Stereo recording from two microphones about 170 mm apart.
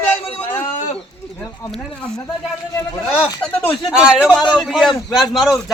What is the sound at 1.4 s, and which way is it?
Speech, 10° left (ahead or behind).